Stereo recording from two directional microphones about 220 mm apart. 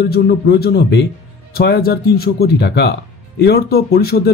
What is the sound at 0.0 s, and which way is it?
Speech, 45° left (ahead or behind).